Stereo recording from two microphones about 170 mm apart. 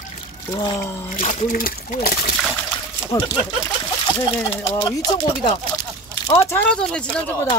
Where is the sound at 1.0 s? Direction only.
50° left (ahead or behind).